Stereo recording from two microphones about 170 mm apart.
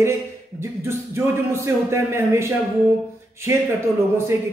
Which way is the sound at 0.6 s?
15° right (ahead or behind).